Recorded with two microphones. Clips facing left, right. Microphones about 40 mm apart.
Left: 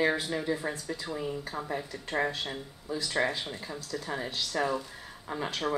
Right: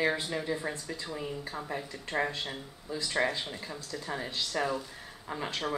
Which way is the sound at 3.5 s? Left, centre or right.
Centre.